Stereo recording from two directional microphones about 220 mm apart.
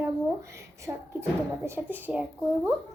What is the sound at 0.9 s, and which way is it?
A woman's voice, 15° right (ahead or behind).